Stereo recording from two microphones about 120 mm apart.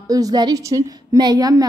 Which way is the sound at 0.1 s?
30° right (ahead or behind).